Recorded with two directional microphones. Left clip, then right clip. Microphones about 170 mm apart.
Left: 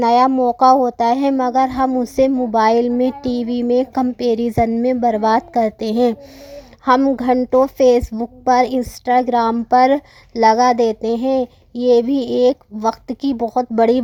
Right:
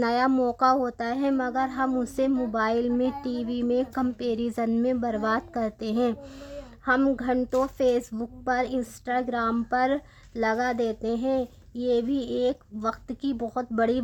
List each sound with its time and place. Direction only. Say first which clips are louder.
0.0 s speech: left 12 dB; 20° left (ahead or behind)
0.3 s speech: left 9 dB; centre (ahead or behind)
0.6 s a woman's voice: left 13 dB; 20° left (ahead or behind)